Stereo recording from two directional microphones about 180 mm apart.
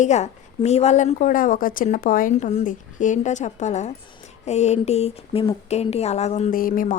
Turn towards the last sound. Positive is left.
turn(degrees=50)  # may be behind; listen again after turning